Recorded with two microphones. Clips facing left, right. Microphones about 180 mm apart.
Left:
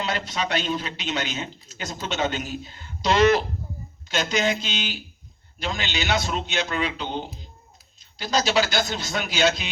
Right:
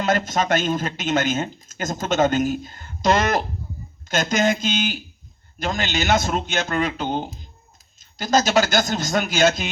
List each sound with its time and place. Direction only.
0.0 s speech: 45° right (ahead or behind)